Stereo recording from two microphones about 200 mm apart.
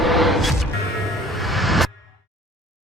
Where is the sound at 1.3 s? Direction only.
Centre (ahead or behind).